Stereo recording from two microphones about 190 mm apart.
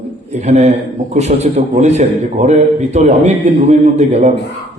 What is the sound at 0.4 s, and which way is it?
A man's voice, 35° right (ahead or behind).